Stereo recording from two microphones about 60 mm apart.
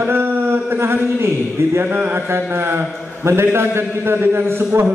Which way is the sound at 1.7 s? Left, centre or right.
Right.